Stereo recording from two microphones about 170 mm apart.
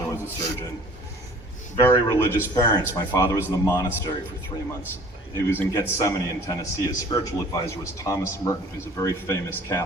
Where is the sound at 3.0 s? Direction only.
20° left (ahead or behind).